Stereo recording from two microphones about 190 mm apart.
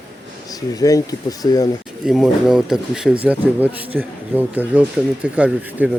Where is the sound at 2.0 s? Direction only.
Centre (ahead or behind).